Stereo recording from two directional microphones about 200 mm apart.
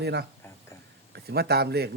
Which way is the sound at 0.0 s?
55° right (ahead or behind).